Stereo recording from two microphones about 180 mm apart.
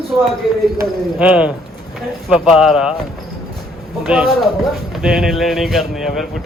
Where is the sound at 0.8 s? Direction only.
5° right (ahead or behind).